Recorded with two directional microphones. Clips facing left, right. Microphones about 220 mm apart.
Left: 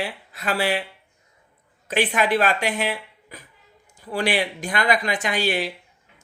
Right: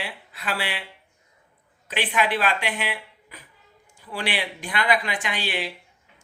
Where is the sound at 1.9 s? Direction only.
45° left (ahead or behind).